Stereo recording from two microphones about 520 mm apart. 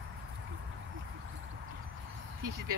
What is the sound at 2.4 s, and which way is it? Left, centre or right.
Speech, right.